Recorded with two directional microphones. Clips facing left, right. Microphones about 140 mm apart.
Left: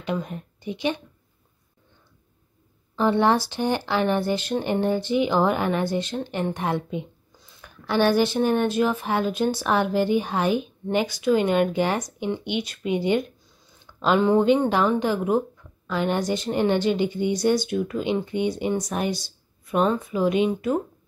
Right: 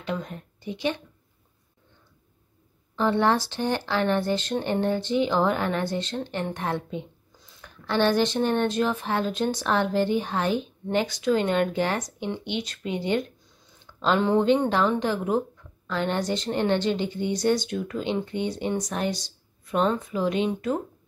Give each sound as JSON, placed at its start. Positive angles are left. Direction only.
{"t": 0.0, "sound": "speech", "side_deg": 15}
{"t": 3.0, "sound": "a woman's voice", "side_deg": 15}